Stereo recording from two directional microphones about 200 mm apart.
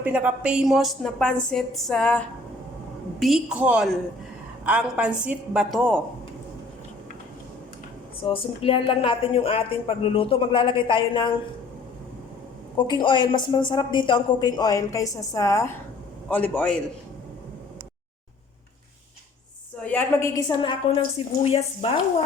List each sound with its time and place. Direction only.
0.0 s a woman's voice: 10° right (ahead or behind)
8.2 s a woman's voice: 25° left (ahead or behind)
12.7 s a woman's voice: 25° left (ahead or behind); by 16.8 s 5° left (ahead or behind)
19.8 s a man's voice: 10° left (ahead or behind)
20.6 s a woman's voice: 25° left (ahead or behind)